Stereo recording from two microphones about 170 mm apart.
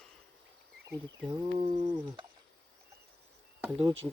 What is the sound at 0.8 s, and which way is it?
Speech, 15° right (ahead or behind).